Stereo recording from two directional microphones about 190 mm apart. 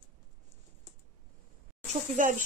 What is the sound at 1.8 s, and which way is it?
Speech, 40° right (ahead or behind).